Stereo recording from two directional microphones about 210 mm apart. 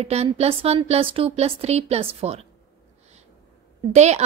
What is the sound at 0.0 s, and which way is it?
A woman's voice, 30° right (ahead or behind).